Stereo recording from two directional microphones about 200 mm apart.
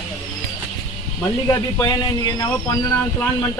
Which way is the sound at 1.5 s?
20° left (ahead or behind).